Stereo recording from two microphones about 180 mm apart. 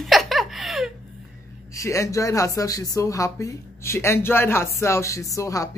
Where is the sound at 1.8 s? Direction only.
15° left (ahead or behind).